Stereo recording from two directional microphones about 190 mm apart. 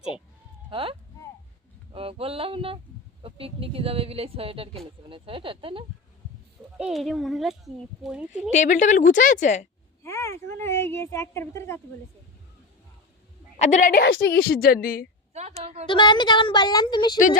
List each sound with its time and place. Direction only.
0.7 s a sound: 30° right (ahead or behind)
3.2 s a woman's voice: 30° right (ahead or behind)
5.0 s a sound: 30° right (ahead or behind)
6.7 s speech: centre (ahead or behind)
8.5 s a woman's voice: 40° left (ahead or behind)
10.0 s a woman's voice: 15° left (ahead or behind)
13.6 s a woman's voice: 40° left (ahead or behind)
14.1 s a woman's voice: 65° left (ahead or behind); by 15.0 s 50° left (ahead or behind)
15.3 s a woman's voice: 35° right (ahead or behind)
15.9 s speech: 25° left (ahead or behind)